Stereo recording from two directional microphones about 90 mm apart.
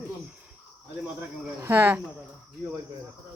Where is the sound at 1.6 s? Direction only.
25° right (ahead or behind).